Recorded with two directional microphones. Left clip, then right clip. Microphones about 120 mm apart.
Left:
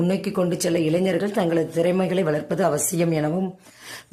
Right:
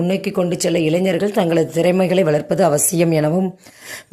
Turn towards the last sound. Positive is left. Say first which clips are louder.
# right 6 dB
turn(degrees=-40)  # may be behind; listen again after turning